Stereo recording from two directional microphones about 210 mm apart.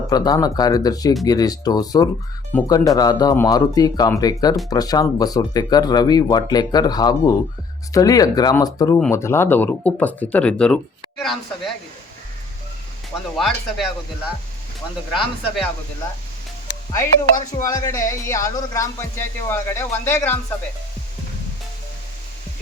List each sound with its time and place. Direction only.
0.1 s speech: 20° left (ahead or behind); by 11.7 s centre (ahead or behind)
13.3 s speech: centre (ahead or behind)
16.9 s speech: 15° left (ahead or behind)